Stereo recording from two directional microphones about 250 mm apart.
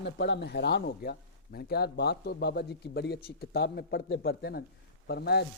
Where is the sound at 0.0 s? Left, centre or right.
Left.